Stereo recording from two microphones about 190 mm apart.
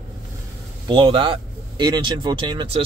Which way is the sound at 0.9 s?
30° right (ahead or behind).